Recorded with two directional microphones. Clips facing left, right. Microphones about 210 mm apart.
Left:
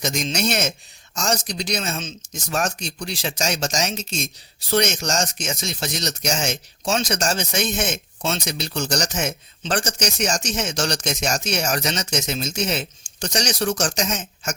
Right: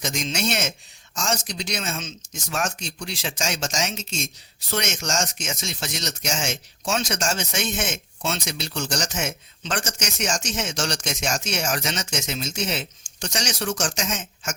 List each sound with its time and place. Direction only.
0.0 s speech: 40° left (ahead or behind)